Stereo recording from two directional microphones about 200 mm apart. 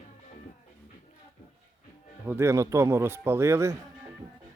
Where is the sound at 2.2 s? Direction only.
10° right (ahead or behind).